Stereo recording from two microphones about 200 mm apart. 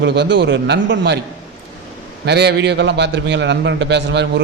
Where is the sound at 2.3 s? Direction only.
55° right (ahead or behind).